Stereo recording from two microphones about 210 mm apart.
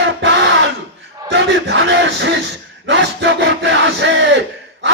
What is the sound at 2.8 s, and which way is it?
Battle cry, 55° right (ahead or behind).